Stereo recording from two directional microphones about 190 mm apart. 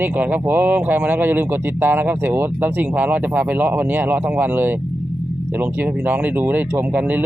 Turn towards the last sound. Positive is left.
turn(degrees=-10)  # may be behind; listen again after turning